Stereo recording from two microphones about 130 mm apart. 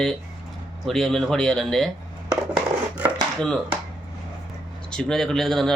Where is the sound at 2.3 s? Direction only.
10° right (ahead or behind).